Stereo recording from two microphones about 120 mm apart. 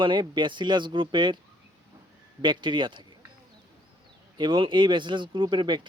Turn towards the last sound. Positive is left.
turn(degrees=-40)  # may be behind; listen again after turning